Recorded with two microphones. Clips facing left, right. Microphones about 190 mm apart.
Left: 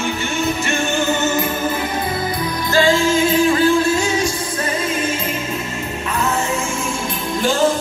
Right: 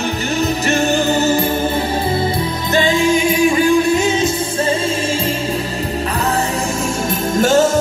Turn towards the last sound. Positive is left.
turn(degrees=-45)  # may be behind; listen again after turning